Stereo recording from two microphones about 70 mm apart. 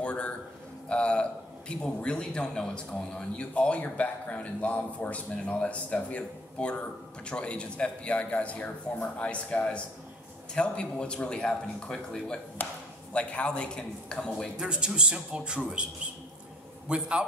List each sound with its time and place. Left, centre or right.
0.0 s a sound: centre
1.7 s speech: centre
14.6 s a man's voice: centre